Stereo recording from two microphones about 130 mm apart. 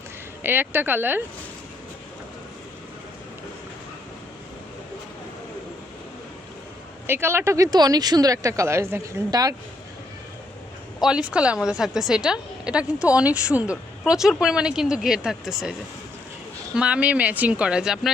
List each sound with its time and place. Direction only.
0.4 s a woman's voice: 15° right (ahead or behind)
7.1 s speech: 20° right (ahead or behind)
11.0 s a woman's voice: 5° right (ahead or behind)
16.7 s a woman's voice: 10° right (ahead or behind)